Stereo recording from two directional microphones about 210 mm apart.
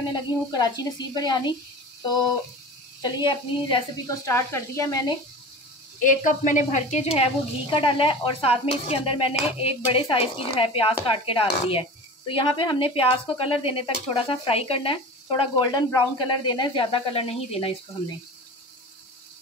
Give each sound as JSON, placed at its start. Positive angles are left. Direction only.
{"t": 0.1, "sound": "speech", "side_deg": 20}
{"t": 3.0, "sound": "speech", "side_deg": 20}
{"t": 5.9, "sound": "speech", "side_deg": 40}